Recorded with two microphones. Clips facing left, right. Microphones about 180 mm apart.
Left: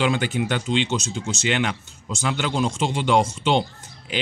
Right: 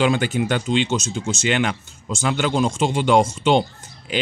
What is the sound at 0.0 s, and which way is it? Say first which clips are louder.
Speech: right 3 dB; 45° right (ahead or behind).